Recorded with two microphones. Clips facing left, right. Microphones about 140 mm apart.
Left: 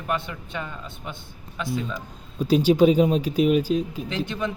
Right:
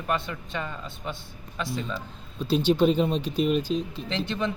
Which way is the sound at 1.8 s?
10° left (ahead or behind).